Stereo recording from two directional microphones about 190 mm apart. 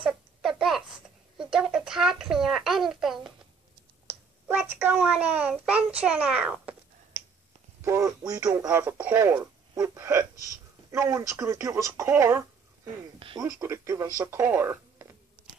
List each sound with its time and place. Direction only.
0.0 s a sound: centre (ahead or behind)
4.7 s speech: 10° right (ahead or behind)
7.8 s speech: 15° right (ahead or behind)